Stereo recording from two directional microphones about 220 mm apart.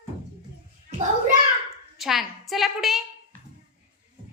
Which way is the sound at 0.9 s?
30° right (ahead or behind).